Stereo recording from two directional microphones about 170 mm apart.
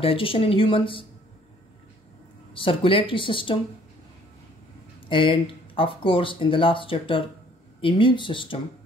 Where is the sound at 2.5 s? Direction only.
30° left (ahead or behind).